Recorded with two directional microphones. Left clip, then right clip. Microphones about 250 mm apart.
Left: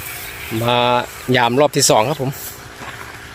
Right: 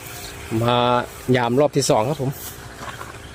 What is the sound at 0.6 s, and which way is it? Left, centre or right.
Speech, centre.